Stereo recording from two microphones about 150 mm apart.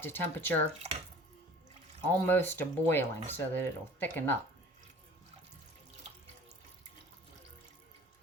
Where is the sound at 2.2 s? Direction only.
15° left (ahead or behind).